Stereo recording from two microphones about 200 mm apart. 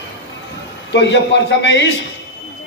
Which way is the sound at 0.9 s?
60° left (ahead or behind).